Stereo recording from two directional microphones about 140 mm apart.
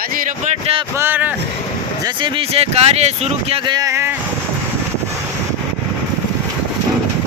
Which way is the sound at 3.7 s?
25° right (ahead or behind).